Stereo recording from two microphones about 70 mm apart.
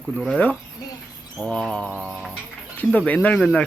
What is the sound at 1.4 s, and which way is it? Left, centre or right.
Speech, centre.